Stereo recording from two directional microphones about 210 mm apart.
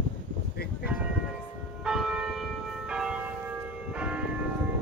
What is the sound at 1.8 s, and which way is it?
Church bell, centre (ahead or behind).